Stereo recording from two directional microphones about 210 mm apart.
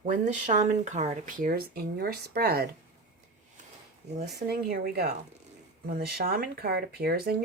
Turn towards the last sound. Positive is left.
turn(degrees=-50)  # may be behind; listen again after turning